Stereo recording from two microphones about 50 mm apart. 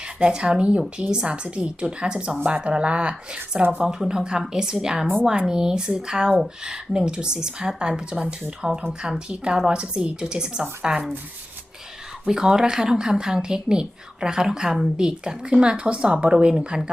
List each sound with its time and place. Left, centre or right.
0.2 s speech: right
3.8 s a woman's voice: centre
12.2 s a woman's voice: centre